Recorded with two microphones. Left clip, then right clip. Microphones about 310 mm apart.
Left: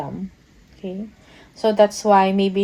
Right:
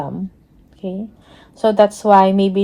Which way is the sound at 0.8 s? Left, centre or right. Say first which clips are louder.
Right 4 dB; right.